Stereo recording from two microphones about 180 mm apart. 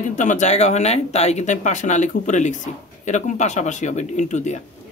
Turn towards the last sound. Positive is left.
turn(degrees=40)  # may be behind; listen again after turning